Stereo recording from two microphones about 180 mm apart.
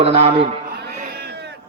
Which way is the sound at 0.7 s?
60° right (ahead or behind).